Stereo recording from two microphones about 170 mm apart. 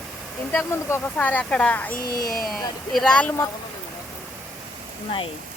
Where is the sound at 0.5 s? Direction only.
15° left (ahead or behind).